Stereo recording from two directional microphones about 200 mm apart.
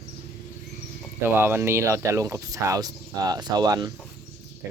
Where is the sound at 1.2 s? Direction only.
10° right (ahead or behind).